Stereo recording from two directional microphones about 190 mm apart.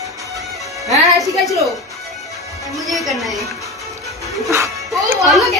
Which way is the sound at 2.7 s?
Centre (ahead or behind).